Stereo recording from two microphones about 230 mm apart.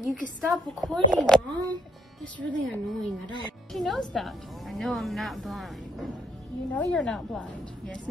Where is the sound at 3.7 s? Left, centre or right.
Centre.